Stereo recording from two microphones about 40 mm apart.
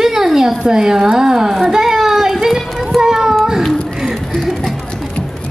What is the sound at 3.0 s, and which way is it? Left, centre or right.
Child singing, centre.